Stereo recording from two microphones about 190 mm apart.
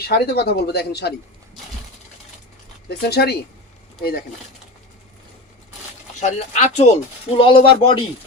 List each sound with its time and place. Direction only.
0.0 s speech: 55° left (ahead or behind)
2.9 s speech: 55° left (ahead or behind)
6.1 s speech: 35° left (ahead or behind)